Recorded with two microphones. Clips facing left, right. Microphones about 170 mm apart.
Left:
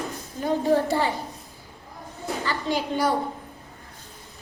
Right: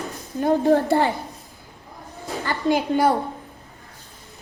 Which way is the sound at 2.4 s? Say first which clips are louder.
Right 6 dB; 50° right (ahead or behind).